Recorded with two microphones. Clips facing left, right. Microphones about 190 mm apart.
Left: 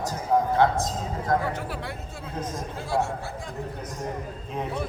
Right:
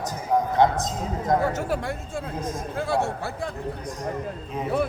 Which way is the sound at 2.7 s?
60° right (ahead or behind).